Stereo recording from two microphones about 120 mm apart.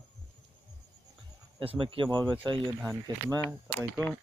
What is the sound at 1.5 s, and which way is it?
Speech, 50° right (ahead or behind).